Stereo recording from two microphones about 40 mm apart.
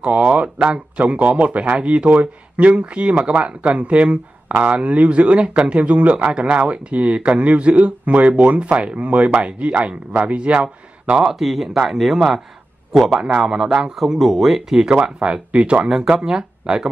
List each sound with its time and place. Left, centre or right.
0.0 s speech: right
11.1 s speech: centre
13.4 s speech: centre
14.8 s speech: right